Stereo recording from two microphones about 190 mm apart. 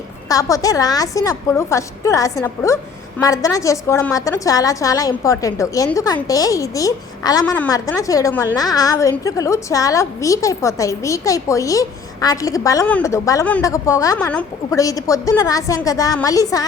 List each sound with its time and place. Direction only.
0.3 s a woman's voice: 15° left (ahead or behind)